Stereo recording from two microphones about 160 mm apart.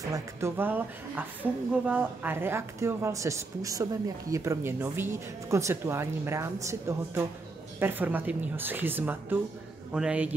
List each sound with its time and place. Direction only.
0.1 s a woman's voice: 15° right (ahead or behind)